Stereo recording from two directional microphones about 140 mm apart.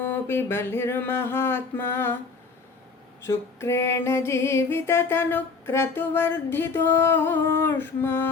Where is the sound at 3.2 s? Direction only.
20° left (ahead or behind).